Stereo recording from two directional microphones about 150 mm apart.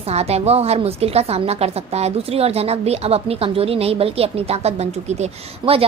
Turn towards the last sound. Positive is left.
turn(degrees=-45)  # may be behind; listen again after turning